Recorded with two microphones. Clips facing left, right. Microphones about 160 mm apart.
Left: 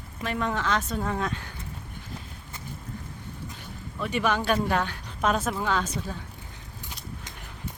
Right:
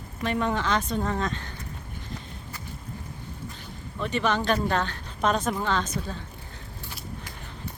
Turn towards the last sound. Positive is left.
turn(degrees=10)  # may be behind; listen again after turning